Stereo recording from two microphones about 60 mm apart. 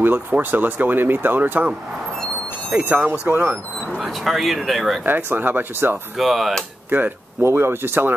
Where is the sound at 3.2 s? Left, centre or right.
Right.